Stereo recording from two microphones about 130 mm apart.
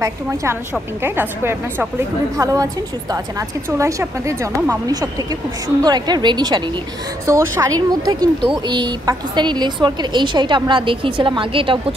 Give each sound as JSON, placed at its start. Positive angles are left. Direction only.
{"t": 0.0, "sound": "a woman's voice", "side_deg": -25}
{"t": 7.2, "sound": "a woman's voice", "side_deg": -25}